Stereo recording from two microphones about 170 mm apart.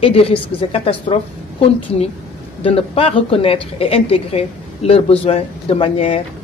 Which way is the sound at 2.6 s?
35° left (ahead or behind).